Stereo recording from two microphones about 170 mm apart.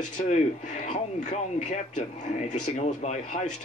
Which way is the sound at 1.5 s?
40° left (ahead or behind).